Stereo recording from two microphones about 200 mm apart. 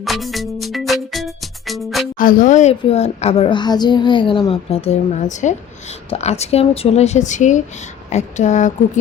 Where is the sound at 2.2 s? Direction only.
45° left (ahead or behind).